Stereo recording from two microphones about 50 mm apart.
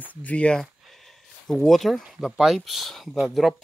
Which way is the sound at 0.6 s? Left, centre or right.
Centre.